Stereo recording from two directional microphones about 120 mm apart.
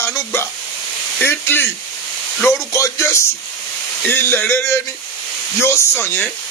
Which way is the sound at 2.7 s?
25° left (ahead or behind).